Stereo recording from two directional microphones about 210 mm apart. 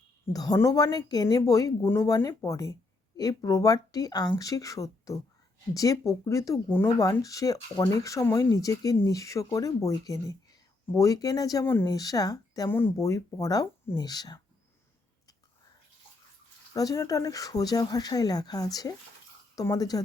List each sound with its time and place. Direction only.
0.3 s speech: 15° left (ahead or behind)
16.7 s speech: 15° left (ahead or behind)